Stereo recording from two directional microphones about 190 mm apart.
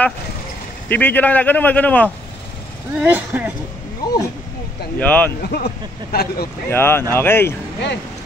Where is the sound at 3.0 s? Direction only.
10° right (ahead or behind).